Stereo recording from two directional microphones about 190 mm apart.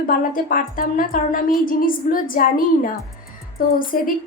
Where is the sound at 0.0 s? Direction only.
50° left (ahead or behind).